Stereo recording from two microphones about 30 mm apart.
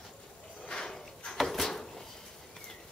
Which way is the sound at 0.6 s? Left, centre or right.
Left.